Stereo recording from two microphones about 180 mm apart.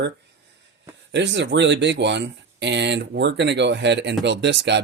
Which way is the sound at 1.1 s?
75° right (ahead or behind).